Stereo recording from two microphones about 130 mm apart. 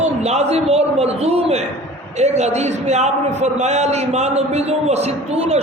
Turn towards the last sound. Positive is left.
turn(degrees=-55)  # may be behind; listen again after turning